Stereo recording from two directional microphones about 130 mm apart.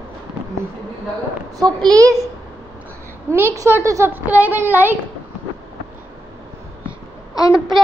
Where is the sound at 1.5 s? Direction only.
30° right (ahead or behind).